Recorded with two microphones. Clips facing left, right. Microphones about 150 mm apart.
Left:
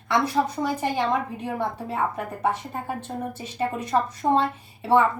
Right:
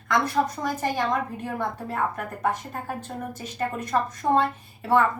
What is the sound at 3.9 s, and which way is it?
Speech, 20° left (ahead or behind).